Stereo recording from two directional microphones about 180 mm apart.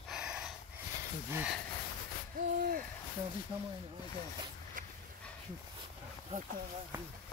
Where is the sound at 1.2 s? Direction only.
10° right (ahead or behind).